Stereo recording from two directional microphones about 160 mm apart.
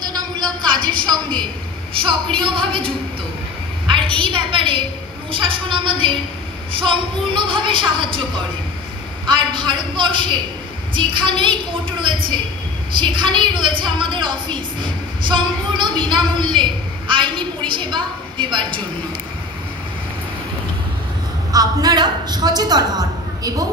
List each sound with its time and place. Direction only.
0.0 s a sound: 25° right (ahead or behind)
2.0 s a woman's voice: 30° right (ahead or behind)
21.5 s a woman's voice: 25° right (ahead or behind)